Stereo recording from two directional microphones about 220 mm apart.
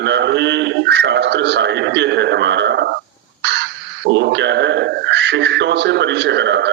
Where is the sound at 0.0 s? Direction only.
50° right (ahead or behind).